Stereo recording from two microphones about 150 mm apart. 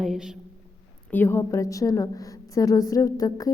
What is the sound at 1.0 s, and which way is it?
A woman's voice, 15° left (ahead or behind).